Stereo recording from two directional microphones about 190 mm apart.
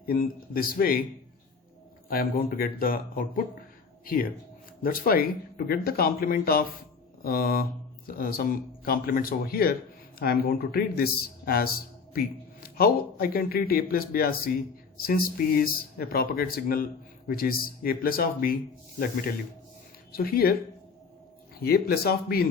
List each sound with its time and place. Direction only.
0.0 s speech: 50° left (ahead or behind)
2.0 s speech: 50° left (ahead or behind)
21.6 s speech: 55° left (ahead or behind)